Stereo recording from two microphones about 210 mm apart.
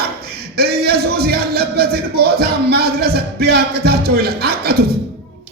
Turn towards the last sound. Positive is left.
turn(degrees=-45)  # may be behind; listen again after turning